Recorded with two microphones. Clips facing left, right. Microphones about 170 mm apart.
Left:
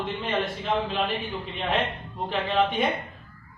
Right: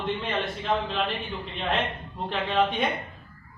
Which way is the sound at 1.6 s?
Centre (ahead or behind).